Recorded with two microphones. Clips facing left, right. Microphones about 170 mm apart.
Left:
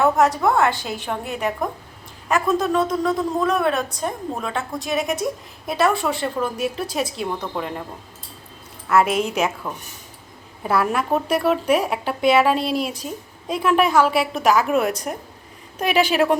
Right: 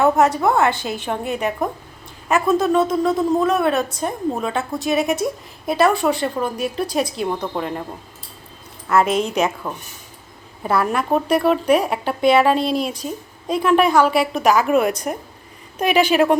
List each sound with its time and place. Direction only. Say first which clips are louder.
0.0 s speech: right 2 dB; centre (ahead or behind)
7.3 s a woman's voice: right 3 dB; 15° right (ahead or behind)
8.9 s a woman's voice: right 1 dB; 5° left (ahead or behind)
10.6 s speech: right 1 dB; 5° left (ahead or behind)